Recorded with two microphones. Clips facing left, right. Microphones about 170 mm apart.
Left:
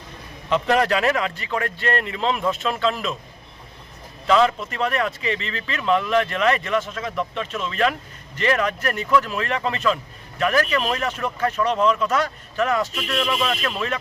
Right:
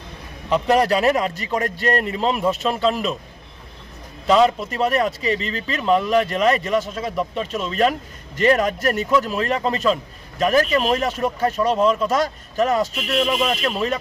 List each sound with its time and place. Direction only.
0.8 s speech: 35° right (ahead or behind)
4.4 s speech: 40° right (ahead or behind)